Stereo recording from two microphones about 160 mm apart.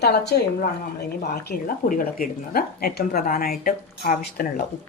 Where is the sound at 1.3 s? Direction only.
65° left (ahead or behind).